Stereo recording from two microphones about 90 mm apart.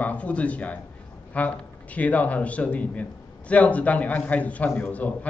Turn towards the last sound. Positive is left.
turn(degrees=15)  # may be behind; listen again after turning